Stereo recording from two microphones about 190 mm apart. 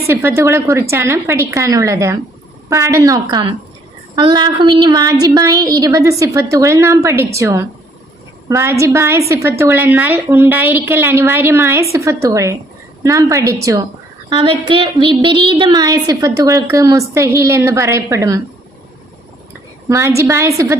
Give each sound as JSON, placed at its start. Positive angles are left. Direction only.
{"t": 0.1, "sound": "a woman's voice", "side_deg": -10}
{"t": 19.9, "sound": "a woman's voice", "side_deg": -15}